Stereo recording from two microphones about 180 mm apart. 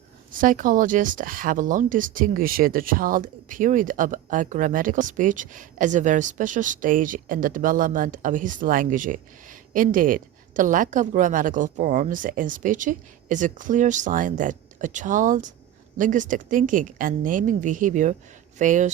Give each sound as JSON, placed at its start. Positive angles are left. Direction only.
{"t": 0.3, "sound": "speech", "side_deg": -50}